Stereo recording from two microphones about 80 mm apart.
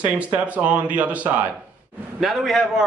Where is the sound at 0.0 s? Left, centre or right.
Centre.